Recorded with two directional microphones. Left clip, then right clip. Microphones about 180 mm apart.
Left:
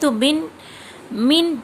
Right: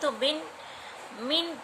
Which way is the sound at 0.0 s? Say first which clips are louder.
Left 9 dB; 70° left (ahead or behind).